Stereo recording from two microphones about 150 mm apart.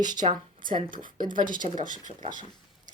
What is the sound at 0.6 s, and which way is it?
Speech, 65° right (ahead or behind).